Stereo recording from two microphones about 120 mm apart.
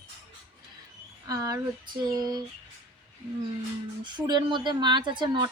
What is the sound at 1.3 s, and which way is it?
A woman's voice, 25° right (ahead or behind).